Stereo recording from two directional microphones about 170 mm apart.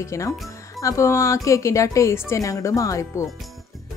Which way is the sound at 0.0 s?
15° left (ahead or behind).